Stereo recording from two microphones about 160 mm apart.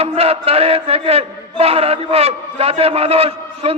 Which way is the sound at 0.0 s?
40° right (ahead or behind).